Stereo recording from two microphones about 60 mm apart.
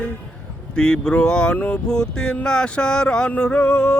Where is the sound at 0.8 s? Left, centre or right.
Centre.